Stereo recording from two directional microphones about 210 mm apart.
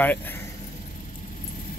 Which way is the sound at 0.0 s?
10° left (ahead or behind).